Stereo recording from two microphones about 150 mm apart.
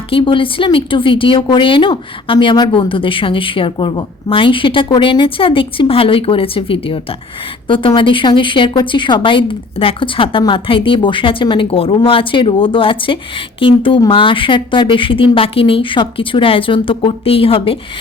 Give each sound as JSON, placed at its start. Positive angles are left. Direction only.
{"t": 0.1, "sound": "a woman's voice", "side_deg": 35}